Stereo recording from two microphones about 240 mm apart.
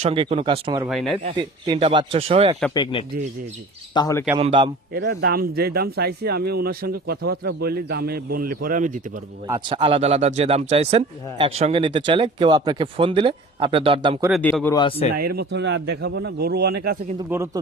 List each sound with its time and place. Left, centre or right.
0.0 s speech: right
0.9 s speech: centre
1.4 s speech: centre
2.7 s speech: centre
4.4 s speech: right
4.9 s speech: right
9.5 s speech: right
14.3 s speech: centre
14.8 s speech: left
15.1 s a man's voice: right
17.2 s speech: centre